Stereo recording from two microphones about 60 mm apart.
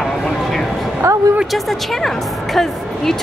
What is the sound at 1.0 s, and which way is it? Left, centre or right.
Speech, right.